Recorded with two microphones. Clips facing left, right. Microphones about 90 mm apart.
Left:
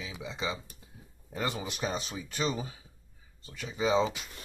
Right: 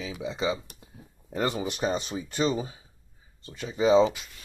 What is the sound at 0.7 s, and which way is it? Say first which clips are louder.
Speech: right 4 dB; 75° right (ahead or behind).